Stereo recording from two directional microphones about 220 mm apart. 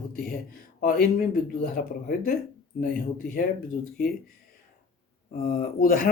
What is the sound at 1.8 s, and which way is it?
Speech, 40° left (ahead or behind).